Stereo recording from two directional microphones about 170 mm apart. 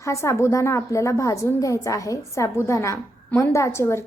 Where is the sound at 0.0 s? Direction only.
15° left (ahead or behind).